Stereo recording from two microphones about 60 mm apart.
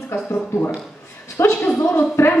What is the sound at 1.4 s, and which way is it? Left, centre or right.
Speech, left.